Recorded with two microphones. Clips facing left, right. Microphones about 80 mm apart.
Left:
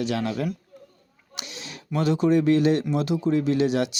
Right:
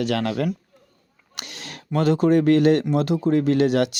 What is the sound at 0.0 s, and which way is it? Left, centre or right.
A man's voice, right.